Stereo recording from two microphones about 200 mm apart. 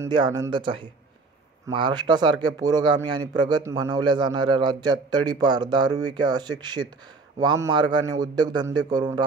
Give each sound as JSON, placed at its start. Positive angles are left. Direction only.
{"t": 0.0, "sound": "speech", "side_deg": -20}